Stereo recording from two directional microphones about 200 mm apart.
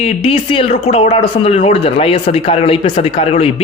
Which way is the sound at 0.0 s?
30° left (ahead or behind).